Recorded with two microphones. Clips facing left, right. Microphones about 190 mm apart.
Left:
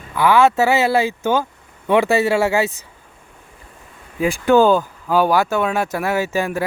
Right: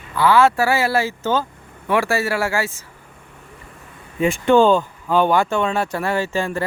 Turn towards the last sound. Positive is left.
turn(degrees=10)  # may be behind; listen again after turning